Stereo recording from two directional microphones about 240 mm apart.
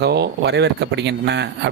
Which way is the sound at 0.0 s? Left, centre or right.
Right.